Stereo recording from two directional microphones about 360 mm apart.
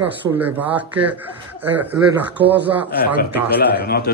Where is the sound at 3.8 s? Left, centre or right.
Left.